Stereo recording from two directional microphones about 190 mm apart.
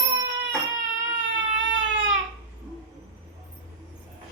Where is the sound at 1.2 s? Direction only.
85° right.